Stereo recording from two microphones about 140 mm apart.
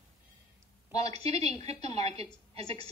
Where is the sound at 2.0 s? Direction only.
50° right (ahead or behind).